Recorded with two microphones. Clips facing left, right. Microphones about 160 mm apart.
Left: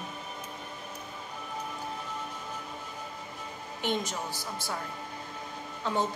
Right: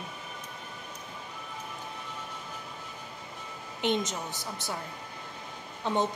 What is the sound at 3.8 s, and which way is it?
Speech, 20° right (ahead or behind).